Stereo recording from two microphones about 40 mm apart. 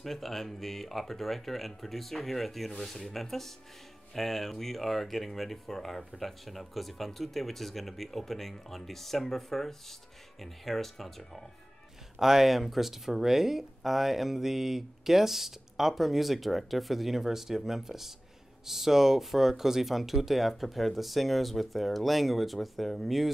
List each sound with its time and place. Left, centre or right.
0.0 s speech: centre
12.2 s speech: centre